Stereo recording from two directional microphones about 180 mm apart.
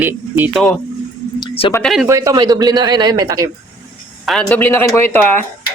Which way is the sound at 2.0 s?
15° right (ahead or behind).